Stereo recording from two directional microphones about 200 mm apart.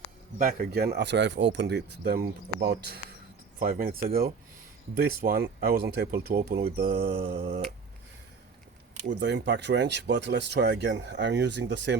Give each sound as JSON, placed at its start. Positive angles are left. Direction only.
{"t": 0.3, "sound": "speech", "side_deg": -45}
{"t": 7.2, "sound": "finger snapping", "side_deg": -30}
{"t": 9.2, "sound": "speech", "side_deg": -60}